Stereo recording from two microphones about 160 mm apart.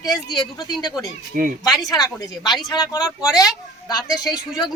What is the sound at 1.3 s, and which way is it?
Speech, 55° right (ahead or behind).